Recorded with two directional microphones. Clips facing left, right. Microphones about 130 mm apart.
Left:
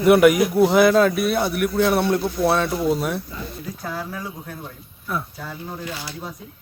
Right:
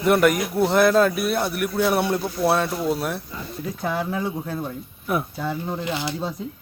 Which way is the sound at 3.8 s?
20° right (ahead or behind).